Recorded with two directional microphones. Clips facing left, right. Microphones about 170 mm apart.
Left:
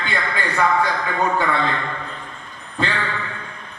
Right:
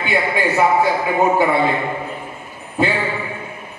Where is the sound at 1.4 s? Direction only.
10° right (ahead or behind).